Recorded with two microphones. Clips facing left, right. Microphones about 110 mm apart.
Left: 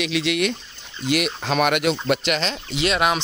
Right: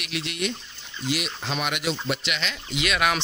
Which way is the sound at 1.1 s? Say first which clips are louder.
Left 7 dB; 60° left (ahead or behind).